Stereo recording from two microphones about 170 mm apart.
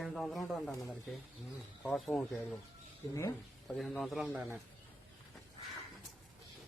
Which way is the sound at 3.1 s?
20° left (ahead or behind).